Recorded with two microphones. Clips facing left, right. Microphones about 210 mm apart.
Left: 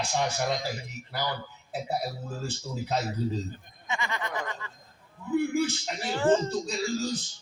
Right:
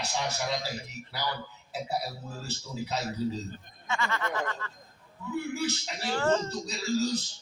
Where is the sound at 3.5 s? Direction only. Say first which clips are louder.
Right 1 dB; 15° left (ahead or behind).